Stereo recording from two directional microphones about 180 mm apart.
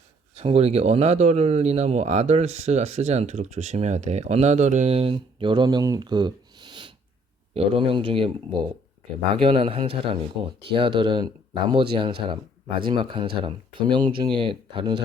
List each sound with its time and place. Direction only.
0.3 s speech: 35° right (ahead or behind)
9.3 s speech: 30° right (ahead or behind)